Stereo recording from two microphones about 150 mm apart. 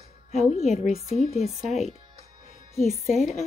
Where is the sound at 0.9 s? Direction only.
45° right (ahead or behind).